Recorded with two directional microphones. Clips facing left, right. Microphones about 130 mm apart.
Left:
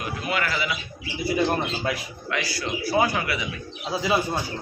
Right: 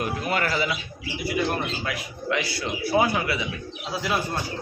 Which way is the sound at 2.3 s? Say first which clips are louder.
Right 1 dB; 25° right (ahead or behind).